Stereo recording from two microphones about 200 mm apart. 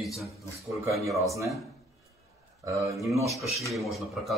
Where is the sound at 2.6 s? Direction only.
15° right (ahead or behind).